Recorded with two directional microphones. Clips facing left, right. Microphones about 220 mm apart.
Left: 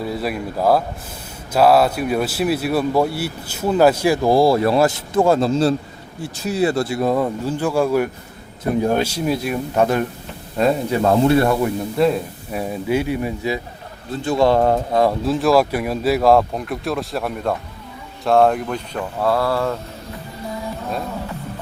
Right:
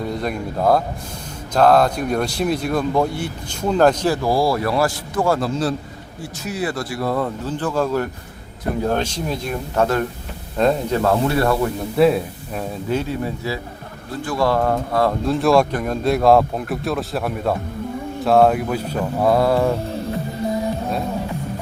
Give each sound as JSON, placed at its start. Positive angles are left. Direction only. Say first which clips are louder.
{"t": 0.0, "sound": "speech", "louder": "even", "side_deg": 5}
{"t": 11.0, "sound": "speech", "louder": "left 4 dB", "side_deg": 20}
{"t": 11.9, "sound": "speech", "louder": "right 3 dB", "side_deg": -5}
{"t": 12.5, "sound": "speech", "louder": "left 3 dB", "side_deg": 10}
{"t": 15.2, "sound": "speech", "louder": "even", "side_deg": 0}
{"t": 18.9, "sound": "mantra", "louder": "right 3 dB", "side_deg": -15}